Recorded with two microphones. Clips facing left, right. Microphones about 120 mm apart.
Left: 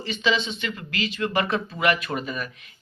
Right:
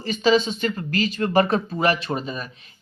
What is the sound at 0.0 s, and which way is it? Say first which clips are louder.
Speech: right 6 dB; 40° right (ahead or behind).